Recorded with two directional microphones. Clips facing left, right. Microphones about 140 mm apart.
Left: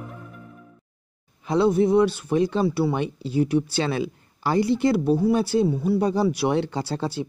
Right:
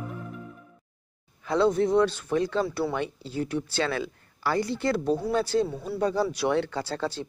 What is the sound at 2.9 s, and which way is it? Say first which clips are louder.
Speech: left 5 dB; 15° left (ahead or behind).